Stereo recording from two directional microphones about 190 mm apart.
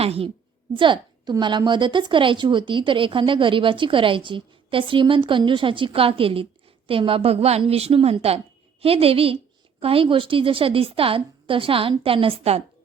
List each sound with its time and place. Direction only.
0.0 s a woman's voice: 30° right (ahead or behind)